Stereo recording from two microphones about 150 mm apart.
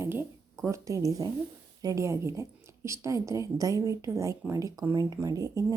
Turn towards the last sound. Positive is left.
turn(degrees=-20)  # may be behind; listen again after turning